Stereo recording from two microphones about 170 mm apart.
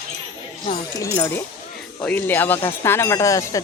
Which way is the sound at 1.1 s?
15° left (ahead or behind).